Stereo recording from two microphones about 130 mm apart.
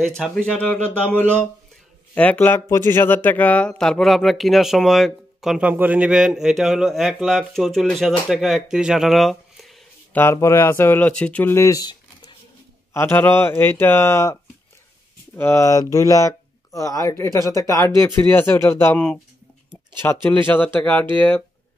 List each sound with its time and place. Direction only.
0.2 s a man's voice: 5° left (ahead or behind)
10.1 s speech: 20° left (ahead or behind)
12.9 s a man's voice: 15° left (ahead or behind)
20.2 s a man's voice: 15° left (ahead or behind)